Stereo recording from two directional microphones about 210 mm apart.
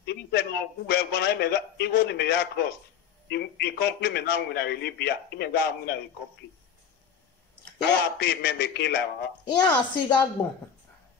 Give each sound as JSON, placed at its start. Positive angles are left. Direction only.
{"t": 0.0, "sound": "a man's voice", "side_deg": 50}
{"t": 7.8, "sound": "a man's voice", "side_deg": 50}
{"t": 9.6, "sound": "a woman's voice", "side_deg": 20}